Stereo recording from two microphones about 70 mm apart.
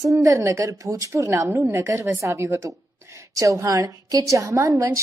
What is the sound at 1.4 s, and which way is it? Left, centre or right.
Speech, right.